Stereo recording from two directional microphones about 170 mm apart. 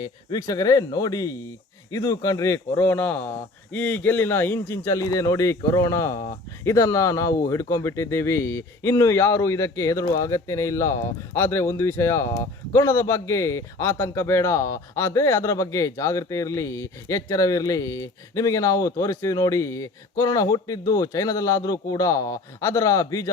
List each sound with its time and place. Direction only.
0.0 s a man's voice: 20° left (ahead or behind)